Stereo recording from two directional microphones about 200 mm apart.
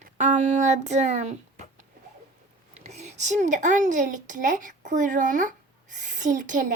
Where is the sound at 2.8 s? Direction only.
35° right (ahead or behind).